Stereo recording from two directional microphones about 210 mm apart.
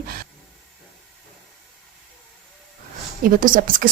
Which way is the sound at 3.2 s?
40° right (ahead or behind).